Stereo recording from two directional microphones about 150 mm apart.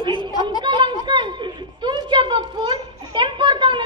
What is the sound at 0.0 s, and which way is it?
Chatter, 30° right (ahead or behind).